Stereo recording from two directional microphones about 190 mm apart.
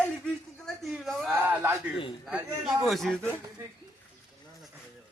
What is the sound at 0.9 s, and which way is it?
Speech, centre (ahead or behind).